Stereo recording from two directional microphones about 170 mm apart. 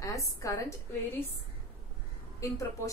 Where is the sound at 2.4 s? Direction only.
20° left (ahead or behind).